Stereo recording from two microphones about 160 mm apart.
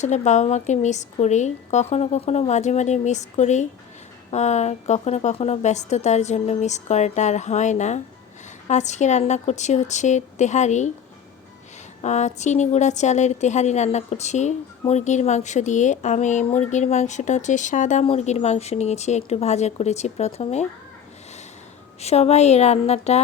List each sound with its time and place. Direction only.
0.0 s a woman's voice: 45° left (ahead or behind)
12.0 s a woman's voice: 45° left (ahead or behind)
22.0 s a woman's voice: 40° left (ahead or behind)